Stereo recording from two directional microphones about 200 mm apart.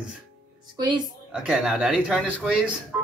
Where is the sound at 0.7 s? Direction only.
20° right (ahead or behind).